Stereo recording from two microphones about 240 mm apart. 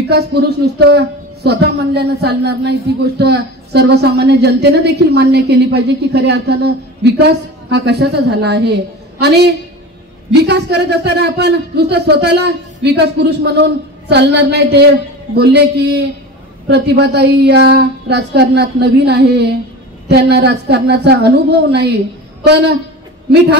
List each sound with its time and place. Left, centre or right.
0.1 s speech: right